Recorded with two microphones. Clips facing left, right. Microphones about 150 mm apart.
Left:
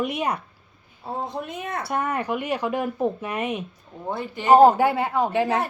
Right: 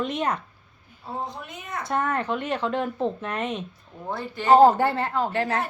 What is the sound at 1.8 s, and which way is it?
A woman's voice, 10° left (ahead or behind).